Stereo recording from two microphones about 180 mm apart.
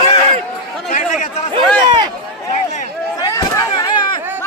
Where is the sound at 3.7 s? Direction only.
25° left (ahead or behind).